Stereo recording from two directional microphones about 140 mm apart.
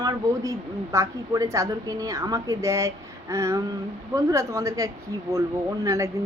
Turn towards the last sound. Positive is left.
turn(degrees=-25)  # may be behind; listen again after turning